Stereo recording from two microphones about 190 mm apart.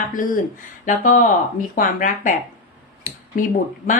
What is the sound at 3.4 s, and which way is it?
Speech, 45° left (ahead or behind).